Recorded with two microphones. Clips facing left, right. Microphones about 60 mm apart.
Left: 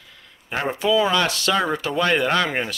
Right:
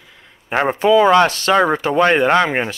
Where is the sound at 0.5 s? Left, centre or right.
Right.